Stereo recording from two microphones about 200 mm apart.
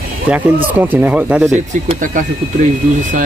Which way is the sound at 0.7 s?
10° right (ahead or behind).